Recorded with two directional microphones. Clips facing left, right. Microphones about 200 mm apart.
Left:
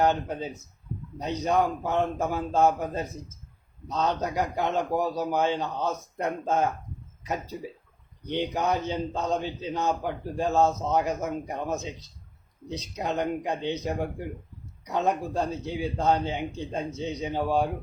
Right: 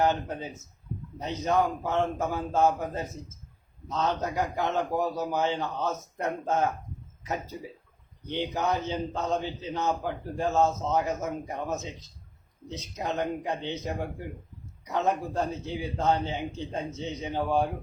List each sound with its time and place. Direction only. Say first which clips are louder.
0.0 s a man's voice: left 2 dB; 20° left (ahead or behind)
8.3 s a man's voice: left 2 dB; 15° left (ahead or behind)